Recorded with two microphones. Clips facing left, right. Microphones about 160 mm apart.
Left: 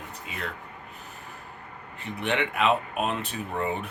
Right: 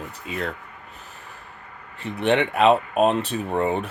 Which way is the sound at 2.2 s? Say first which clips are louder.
Right 7 dB; 35° right (ahead or behind).